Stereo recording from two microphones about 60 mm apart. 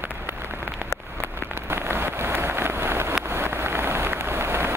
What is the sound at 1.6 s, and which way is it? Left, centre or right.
Vehicle, right.